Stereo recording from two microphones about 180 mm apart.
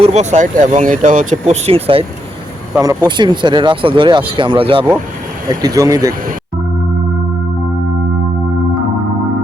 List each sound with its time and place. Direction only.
0.0 s speech: 40° right (ahead or behind)
2.7 s speech: 20° right (ahead or behind)
5.5 s speech: 20° right (ahead or behind)